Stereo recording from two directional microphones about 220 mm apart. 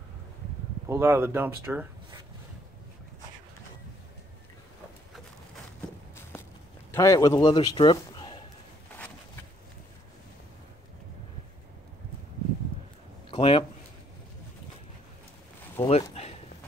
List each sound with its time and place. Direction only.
0.8 s speech: 10° right (ahead or behind)
6.9 s a man's voice: 15° left (ahead or behind)
13.3 s speech: 25° left (ahead or behind)
15.8 s speech: 30° left (ahead or behind)